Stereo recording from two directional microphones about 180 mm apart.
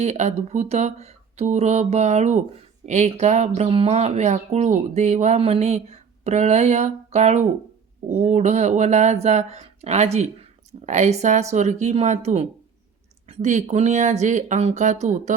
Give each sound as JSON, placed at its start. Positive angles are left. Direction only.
{"t": 0.0, "sound": "speech", "side_deg": -40}